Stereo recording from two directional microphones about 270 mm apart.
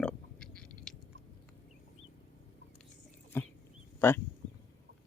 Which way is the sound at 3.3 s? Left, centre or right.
Centre.